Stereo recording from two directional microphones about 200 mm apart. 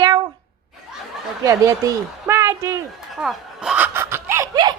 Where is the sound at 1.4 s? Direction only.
15° right (ahead or behind).